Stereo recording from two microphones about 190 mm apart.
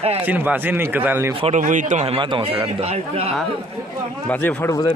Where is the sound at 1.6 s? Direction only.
40° right (ahead or behind).